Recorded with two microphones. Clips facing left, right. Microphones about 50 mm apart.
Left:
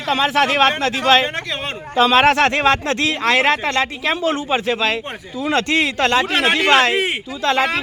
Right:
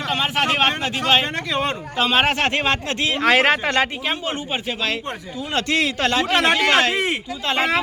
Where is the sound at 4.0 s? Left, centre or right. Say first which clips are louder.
Left 5 dB; left.